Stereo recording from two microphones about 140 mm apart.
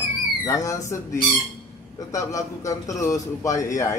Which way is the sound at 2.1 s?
25° left (ahead or behind).